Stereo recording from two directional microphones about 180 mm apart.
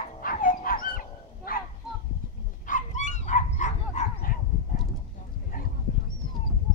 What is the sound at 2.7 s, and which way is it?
Bow-wow, 45° left (ahead or behind).